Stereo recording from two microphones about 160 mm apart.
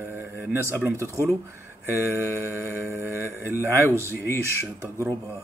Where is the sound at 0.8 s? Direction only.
15° right (ahead or behind).